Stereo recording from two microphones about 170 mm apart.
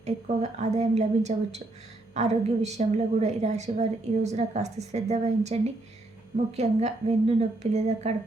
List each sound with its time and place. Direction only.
0.0 s a woman's voice: 40° right (ahead or behind)